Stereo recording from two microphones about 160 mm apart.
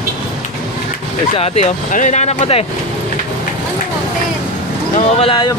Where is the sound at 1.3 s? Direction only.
40° left (ahead or behind).